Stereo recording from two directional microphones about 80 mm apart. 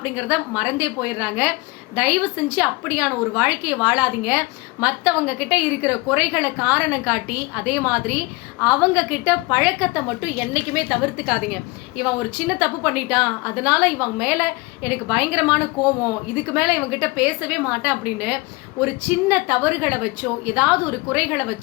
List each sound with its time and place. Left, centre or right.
0.0 s a woman's voice: centre